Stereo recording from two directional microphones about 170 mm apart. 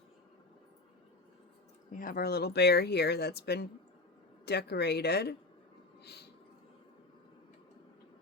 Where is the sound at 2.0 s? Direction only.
55° left (ahead or behind); by 5.3 s 75° left (ahead or behind).